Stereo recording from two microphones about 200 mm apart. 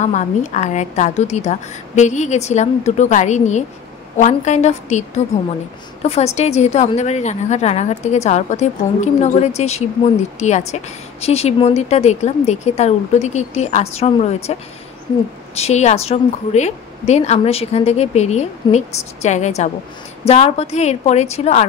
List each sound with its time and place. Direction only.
0.0 s a woman's voice: 35° left (ahead or behind)